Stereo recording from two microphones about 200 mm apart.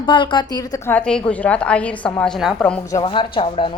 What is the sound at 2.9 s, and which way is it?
Speech, 25° left (ahead or behind).